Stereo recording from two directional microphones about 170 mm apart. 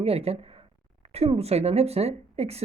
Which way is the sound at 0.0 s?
35° right (ahead or behind).